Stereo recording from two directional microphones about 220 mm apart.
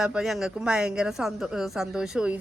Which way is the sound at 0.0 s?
5° right (ahead or behind).